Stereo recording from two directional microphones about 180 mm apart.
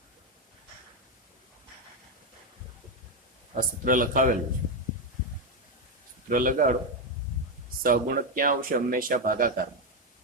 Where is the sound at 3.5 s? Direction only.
45° right (ahead or behind).